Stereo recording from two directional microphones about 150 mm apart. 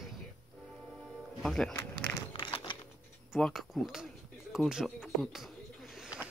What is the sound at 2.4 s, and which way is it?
Typing, 35° left (ahead or behind).